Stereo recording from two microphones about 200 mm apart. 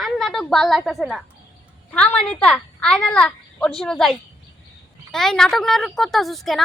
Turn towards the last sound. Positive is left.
turn(degrees=0)  # may be behind; listen again after turning